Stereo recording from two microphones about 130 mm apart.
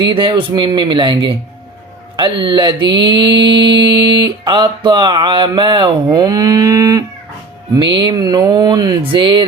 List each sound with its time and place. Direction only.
0.0 s mantra: 40° right (ahead or behind)